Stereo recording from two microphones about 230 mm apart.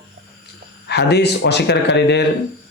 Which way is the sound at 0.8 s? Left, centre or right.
Left.